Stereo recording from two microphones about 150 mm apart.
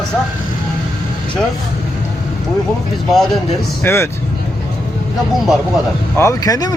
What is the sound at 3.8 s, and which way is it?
Speech, 20° left (ahead or behind).